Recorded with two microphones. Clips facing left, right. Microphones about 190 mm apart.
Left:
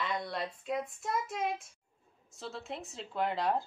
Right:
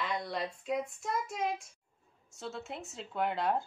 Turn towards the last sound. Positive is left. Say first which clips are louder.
# even
turn(degrees=0)  # may be behind; listen again after turning